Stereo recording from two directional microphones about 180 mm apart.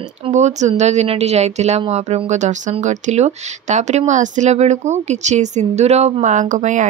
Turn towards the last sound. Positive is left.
turn(degrees=-45)  # may be behind; listen again after turning